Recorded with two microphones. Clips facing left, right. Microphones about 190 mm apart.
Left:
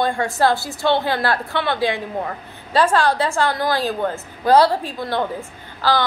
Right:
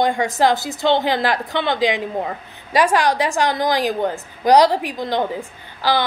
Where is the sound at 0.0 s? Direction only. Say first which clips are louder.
Right 1 dB; 15° right (ahead or behind).